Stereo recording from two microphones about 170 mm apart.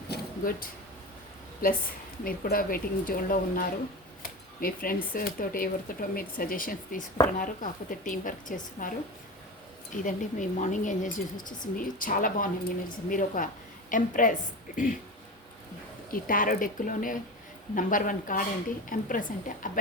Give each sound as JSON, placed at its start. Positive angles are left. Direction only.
{"t": 0.1, "sound": "a sound", "side_deg": 60}
{"t": 1.6, "sound": "speech", "side_deg": 55}
{"t": 4.2, "sound": "a sound", "side_deg": 55}
{"t": 5.1, "sound": "speech", "side_deg": 55}
{"t": 9.9, "sound": "speech", "side_deg": 50}
{"t": 16.1, "sound": "speech", "side_deg": 55}